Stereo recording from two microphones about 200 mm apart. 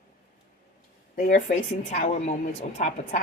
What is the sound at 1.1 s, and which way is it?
A woman's voice, 45° left (ahead or behind).